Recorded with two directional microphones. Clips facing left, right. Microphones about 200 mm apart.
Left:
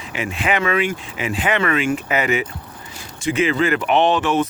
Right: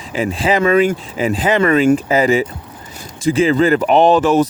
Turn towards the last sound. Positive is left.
turn(degrees=-40)  # may be behind; listen again after turning